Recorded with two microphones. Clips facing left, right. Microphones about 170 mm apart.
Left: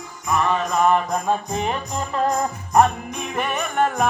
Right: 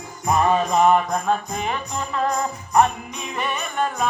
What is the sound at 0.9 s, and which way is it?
Music, centre (ahead or behind).